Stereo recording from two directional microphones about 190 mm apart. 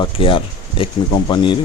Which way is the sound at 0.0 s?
25° left (ahead or behind).